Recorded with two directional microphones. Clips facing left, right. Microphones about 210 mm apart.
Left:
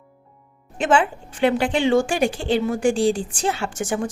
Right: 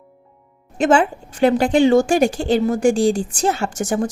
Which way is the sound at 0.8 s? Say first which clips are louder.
Right 4 dB; 40° right (ahead or behind).